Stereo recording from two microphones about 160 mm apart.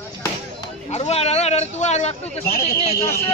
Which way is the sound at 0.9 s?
45° left (ahead or behind).